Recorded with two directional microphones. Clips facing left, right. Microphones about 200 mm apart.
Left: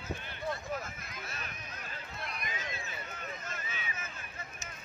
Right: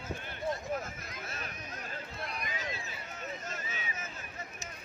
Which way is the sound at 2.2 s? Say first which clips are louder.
Right 1 dB; 35° right (ahead or behind).